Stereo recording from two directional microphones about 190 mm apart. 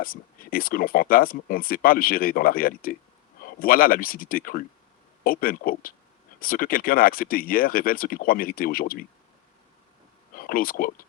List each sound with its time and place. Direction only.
0.0 s speech: 50° left (ahead or behind)
10.3 s speech: 50° left (ahead or behind)